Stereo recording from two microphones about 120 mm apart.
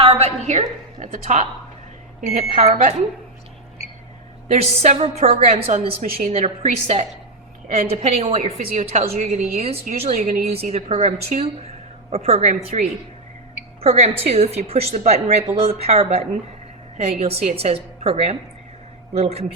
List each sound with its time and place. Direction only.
0.0 s a woman's voice: 55° right (ahead or behind)
0.9 s a woman's voice: 85° right
2.4 s speech: 75° right (ahead or behind)
4.6 s a woman's voice: 55° right (ahead or behind); by 6.5 s 90° right
6.6 s a woman's voice: 55° right (ahead or behind); by 9.4 s 70° right (ahead or behind)
9.6 s a woman's voice: 60° right (ahead or behind); by 10.3 s 75° right (ahead or behind)
10.5 s a woman's voice: 55° right (ahead or behind)
13.8 s a woman's voice: 60° right (ahead or behind)